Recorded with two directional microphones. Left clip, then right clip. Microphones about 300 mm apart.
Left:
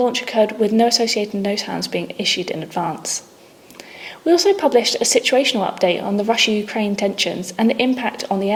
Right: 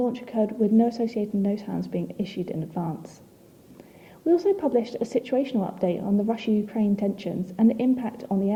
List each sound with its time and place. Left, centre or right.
0.0 s speech: centre
4.3 s speech: centre
6.3 s speech: centre